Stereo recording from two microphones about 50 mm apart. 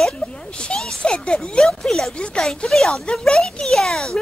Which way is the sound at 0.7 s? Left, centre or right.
Centre.